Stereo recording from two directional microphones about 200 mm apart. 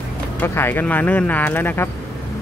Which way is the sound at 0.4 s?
10° left (ahead or behind).